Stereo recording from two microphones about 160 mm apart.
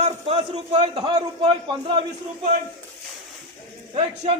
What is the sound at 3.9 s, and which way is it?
Speech, 35° right (ahead or behind).